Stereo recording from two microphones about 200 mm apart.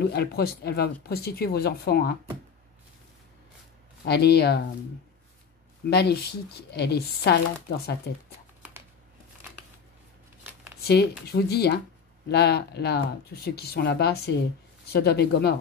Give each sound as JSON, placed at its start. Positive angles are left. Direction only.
{"t": 0.0, "sound": "speech", "side_deg": 55}
{"t": 4.0, "sound": "speech", "side_deg": 55}
{"t": 5.9, "sound": "speech", "side_deg": 55}
{"t": 10.8, "sound": "speech", "side_deg": 50}